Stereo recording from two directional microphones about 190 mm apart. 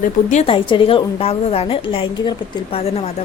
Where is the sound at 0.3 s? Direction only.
35° left (ahead or behind).